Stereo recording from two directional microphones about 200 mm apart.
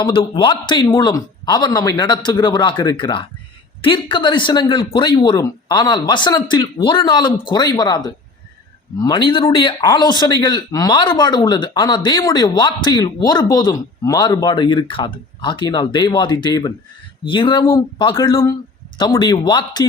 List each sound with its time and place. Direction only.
0.0 s speech: 25° left (ahead or behind)